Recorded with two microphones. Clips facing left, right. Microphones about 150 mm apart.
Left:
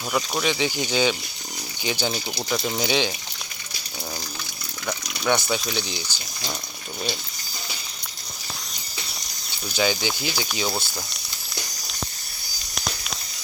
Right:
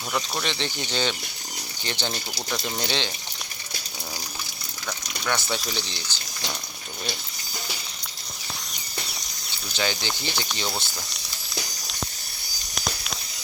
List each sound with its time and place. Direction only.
0.1 s speech: 5° left (ahead or behind)
5.2 s speech: 15° left (ahead or behind)
5.5 s speech: centre (ahead or behind)
9.7 s speech: 10° left (ahead or behind)
12.7 s a sound: centre (ahead or behind)